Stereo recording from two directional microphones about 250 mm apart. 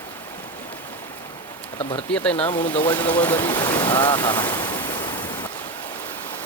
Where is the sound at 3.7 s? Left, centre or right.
Centre.